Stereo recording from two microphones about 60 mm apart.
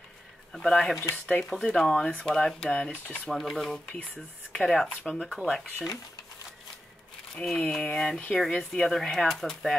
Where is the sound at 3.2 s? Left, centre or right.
Centre.